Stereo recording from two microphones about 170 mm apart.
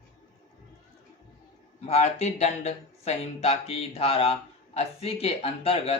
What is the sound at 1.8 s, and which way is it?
A man's voice, 40° left (ahead or behind).